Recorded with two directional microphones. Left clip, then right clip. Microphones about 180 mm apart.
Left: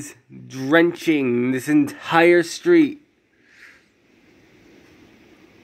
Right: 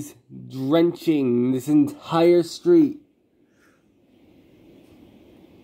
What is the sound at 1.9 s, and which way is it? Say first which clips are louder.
Speech: left 5 dB; 25° left (ahead or behind).